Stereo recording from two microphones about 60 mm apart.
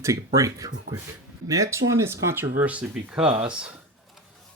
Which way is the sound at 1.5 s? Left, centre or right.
Right.